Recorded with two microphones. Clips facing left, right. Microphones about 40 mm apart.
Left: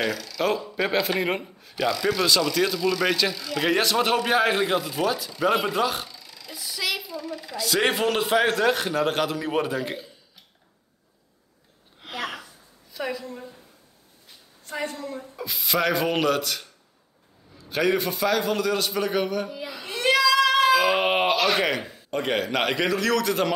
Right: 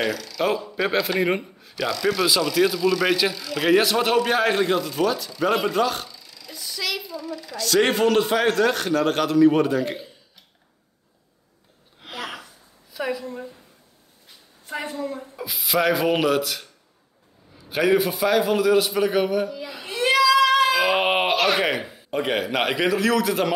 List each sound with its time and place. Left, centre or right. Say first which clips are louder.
0.0 s speech: right 2 dB; centre
6.1 s a sound: left 1 dB; left
6.4 s a sound: even; centre
7.3 s speech: right 5 dB; centre
12.0 s gasp: left 1 dB; centre
12.9 s a woman's voice: right 3 dB; centre
14.7 s a man's voice: right 2 dB; centre
19.7 s baby cry: even; centre
21.5 s speech: right 1 dB; centre